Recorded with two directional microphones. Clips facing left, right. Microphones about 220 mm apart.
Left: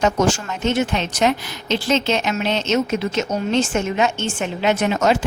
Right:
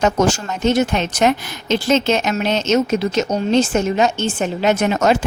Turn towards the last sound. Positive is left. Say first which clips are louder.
# right 2 dB
turn(degrees=-45)  # may be behind; listen again after turning